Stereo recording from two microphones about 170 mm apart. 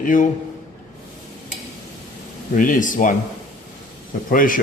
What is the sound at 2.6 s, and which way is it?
Speech, 50° left (ahead or behind).